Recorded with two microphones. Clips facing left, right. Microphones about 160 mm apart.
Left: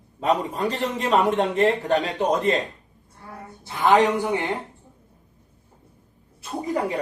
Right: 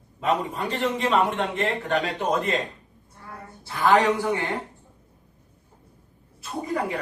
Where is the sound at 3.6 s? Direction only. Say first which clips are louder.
Left 1 dB; 20° left (ahead or behind).